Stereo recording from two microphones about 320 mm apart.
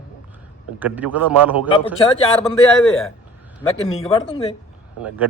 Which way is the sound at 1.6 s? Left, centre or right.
Centre.